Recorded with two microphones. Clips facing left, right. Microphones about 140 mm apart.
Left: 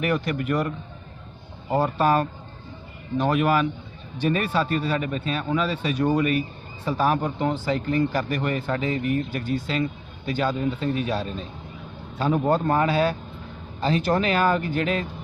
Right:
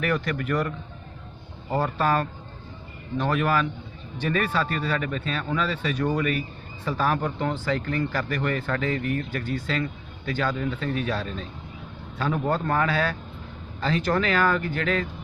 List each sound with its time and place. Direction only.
0.0 s speech: 20° left (ahead or behind)
1.7 s speech: 15° left (ahead or behind)